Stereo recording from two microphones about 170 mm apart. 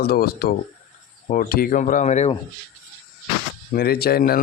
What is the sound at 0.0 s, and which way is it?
A man's voice, 65° left (ahead or behind).